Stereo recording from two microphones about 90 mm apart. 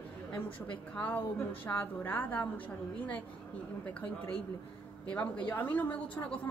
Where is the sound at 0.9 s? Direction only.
15° left (ahead or behind).